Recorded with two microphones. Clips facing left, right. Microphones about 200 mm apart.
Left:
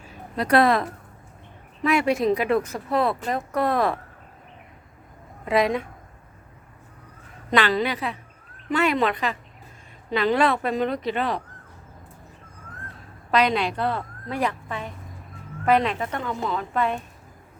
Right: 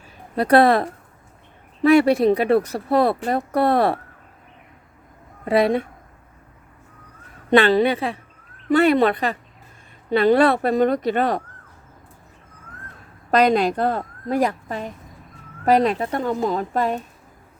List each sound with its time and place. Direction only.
0.3 s speech: 30° right (ahead or behind)
5.5 s speech: 30° right (ahead or behind)
7.5 s a woman's voice: 30° right (ahead or behind); by 11.4 s 45° right (ahead or behind)
13.3 s speech: 40° right (ahead or behind)